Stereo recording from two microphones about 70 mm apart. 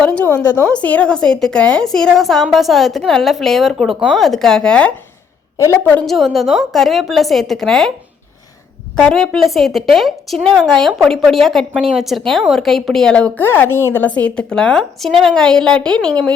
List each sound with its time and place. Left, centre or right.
0.0 s a woman's voice: centre
0.3 s a woman's voice: left
0.7 s a woman's voice: left
6.1 s a woman's voice: centre
9.0 s a woman's voice: centre
13.1 s a woman's voice: centre
13.4 s a woman's voice: left
14.1 s a woman's voice: centre